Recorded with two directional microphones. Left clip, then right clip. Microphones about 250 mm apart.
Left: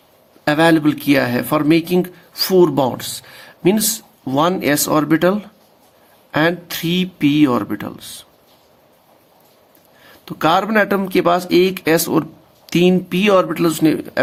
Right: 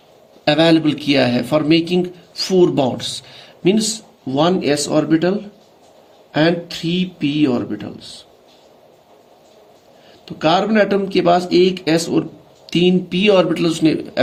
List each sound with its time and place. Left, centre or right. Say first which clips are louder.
0.4 s speech: even; left
10.3 s speech: even; left